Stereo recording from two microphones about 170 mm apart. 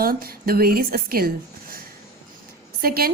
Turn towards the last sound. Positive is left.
turn(degrees=-60)  # may be behind; listen again after turning